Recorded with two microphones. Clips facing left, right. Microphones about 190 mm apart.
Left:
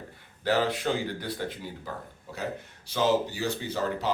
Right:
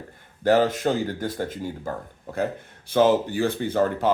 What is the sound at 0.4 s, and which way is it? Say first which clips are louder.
Speech: right 6 dB; 45° right (ahead or behind).